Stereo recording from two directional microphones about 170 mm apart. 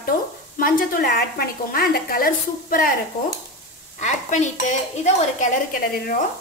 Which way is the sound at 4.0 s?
45° left (ahead or behind).